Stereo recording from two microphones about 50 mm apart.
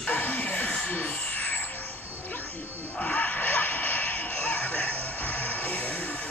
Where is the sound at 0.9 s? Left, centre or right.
Left.